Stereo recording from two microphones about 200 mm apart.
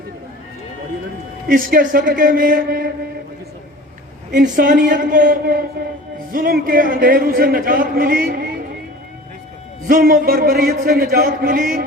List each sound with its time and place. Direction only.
1.5 s a man's voice: 45° right (ahead or behind)
4.3 s a man's voice: 40° right (ahead or behind)
9.9 s a man's voice: 45° right (ahead or behind)